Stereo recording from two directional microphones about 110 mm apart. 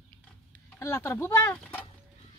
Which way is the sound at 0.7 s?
25° left (ahead or behind).